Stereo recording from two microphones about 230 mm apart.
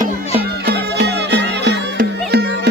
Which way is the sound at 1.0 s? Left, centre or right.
Right.